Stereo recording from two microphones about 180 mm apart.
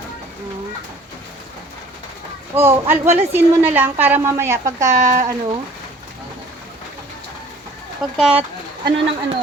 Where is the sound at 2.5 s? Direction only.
15° right (ahead or behind).